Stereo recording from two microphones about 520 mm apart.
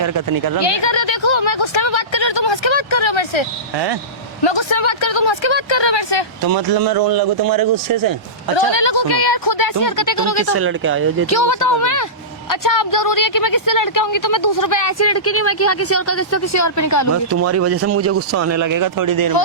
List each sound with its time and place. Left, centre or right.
0.0 s a man's voice: right
0.6 s speech: left
4.4 s speech: left
6.4 s a man's voice: right
8.5 s speech: left
10.5 s speech: right
11.3 s speech: left
17.3 s speech: right